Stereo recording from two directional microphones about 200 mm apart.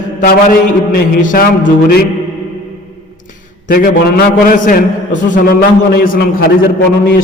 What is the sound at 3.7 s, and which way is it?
A man's voice, 45° left (ahead or behind).